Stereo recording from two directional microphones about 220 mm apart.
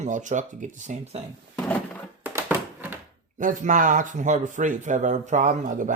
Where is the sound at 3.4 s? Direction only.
35° right (ahead or behind).